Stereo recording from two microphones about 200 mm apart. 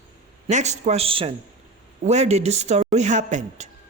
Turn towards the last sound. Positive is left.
turn(degrees=-35)  # may be behind; listen again after turning